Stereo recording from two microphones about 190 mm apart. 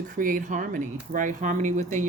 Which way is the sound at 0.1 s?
45° right (ahead or behind).